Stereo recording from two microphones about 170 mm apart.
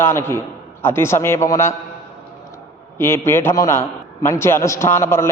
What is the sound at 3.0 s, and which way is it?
A man's voice, 15° left (ahead or behind).